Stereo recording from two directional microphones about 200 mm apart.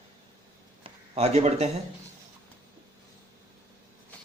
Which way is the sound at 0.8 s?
30° right (ahead or behind).